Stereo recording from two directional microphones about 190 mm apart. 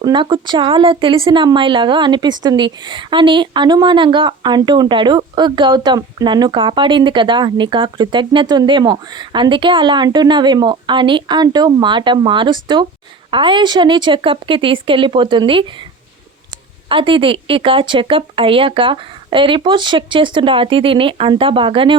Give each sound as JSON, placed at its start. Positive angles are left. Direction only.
{"t": 0.0, "sound": "speech", "side_deg": -25}
{"t": 16.9, "sound": "speech", "side_deg": -25}